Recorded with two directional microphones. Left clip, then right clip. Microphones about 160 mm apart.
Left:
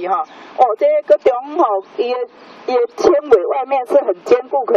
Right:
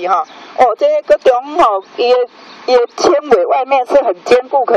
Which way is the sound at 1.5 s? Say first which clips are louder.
Right 4 dB; 15° right (ahead or behind).